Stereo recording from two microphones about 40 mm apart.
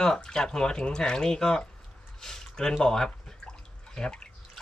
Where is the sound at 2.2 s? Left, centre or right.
Centre.